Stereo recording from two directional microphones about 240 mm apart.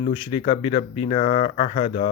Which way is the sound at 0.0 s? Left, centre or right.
Left.